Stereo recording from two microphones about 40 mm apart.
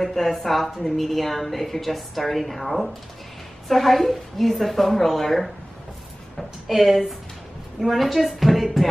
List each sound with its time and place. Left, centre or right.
0.0 s a woman's voice: centre
6.3 s a woman's voice: centre